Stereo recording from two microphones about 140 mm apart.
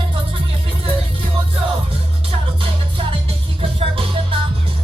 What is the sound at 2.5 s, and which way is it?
Music, 40° right (ahead or behind).